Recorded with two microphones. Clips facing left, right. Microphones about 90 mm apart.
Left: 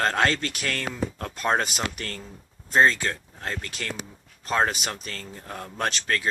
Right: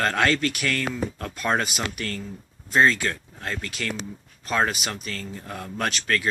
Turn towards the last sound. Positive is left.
turn(degrees=30)  # may be behind; listen again after turning